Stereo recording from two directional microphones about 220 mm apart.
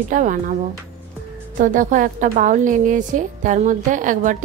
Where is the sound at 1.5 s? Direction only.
35° right (ahead or behind).